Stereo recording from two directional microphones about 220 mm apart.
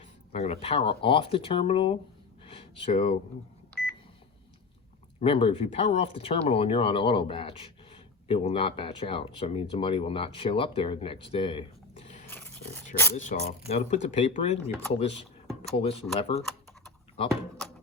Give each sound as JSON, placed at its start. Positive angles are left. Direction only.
{"t": 0.0, "sound": "speech", "side_deg": 30}
{"t": 2.4, "sound": "a sound", "side_deg": 25}
{"t": 5.2, "sound": "speech", "side_deg": 25}
{"t": 12.3, "sound": "dog", "side_deg": 10}
{"t": 13.1, "sound": "speech", "side_deg": 30}